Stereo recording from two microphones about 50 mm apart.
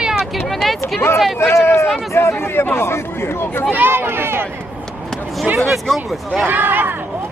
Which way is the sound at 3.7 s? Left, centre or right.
Right.